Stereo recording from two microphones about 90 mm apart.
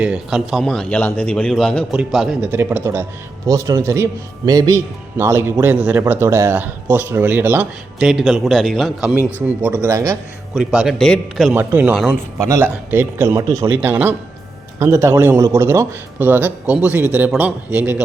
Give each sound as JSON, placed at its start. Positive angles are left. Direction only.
{"t": 0.0, "sound": "a man's voice", "side_deg": -10}
{"t": 0.9, "sound": "a man's voice", "side_deg": 20}
{"t": 1.9, "sound": "speech", "side_deg": -10}
{"t": 2.5, "sound": "a man's voice", "side_deg": -25}
{"t": 5.1, "sound": "speech", "side_deg": -30}
{"t": 7.9, "sound": "a man's voice", "side_deg": -5}
{"t": 9.1, "sound": "speech", "side_deg": -20}
{"t": 9.8, "sound": "a man's voice", "side_deg": -35}
{"t": 10.6, "sound": "speech", "side_deg": -10}
{"t": 10.9, "sound": "a man's voice", "side_deg": 5}
{"t": 11.5, "sound": "a man's voice", "side_deg": -20}
{"t": 13.7, "sound": "speech", "side_deg": -20}
{"t": 14.8, "sound": "a man's voice", "side_deg": -30}
{"t": 16.2, "sound": "speech", "side_deg": -20}